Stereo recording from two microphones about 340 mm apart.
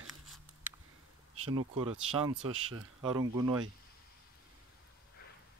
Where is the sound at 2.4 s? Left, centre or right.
Right.